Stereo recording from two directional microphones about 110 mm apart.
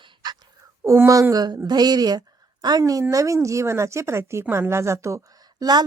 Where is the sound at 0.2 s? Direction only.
40° right (ahead or behind).